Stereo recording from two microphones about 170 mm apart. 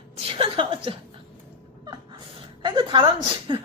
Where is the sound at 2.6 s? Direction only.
30° right (ahead or behind).